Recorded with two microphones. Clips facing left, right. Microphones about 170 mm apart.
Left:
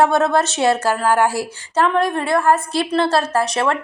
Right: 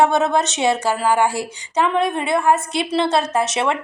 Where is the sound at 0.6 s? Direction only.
15° right (ahead or behind).